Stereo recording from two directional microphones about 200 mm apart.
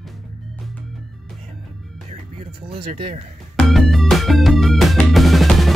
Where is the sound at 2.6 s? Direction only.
25° right (ahead or behind).